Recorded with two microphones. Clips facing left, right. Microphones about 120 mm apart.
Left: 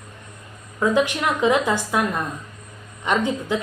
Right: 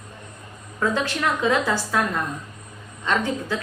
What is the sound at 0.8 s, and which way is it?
A woman's voice, 15° left (ahead or behind).